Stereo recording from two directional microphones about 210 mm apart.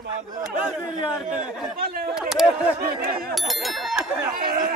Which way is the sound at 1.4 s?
45° right (ahead or behind).